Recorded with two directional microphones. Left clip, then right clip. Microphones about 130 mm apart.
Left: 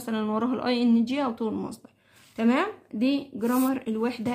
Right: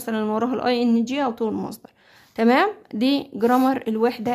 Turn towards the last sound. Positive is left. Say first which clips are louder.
# right 7 dB
turn(degrees=-45)  # may be behind; listen again after turning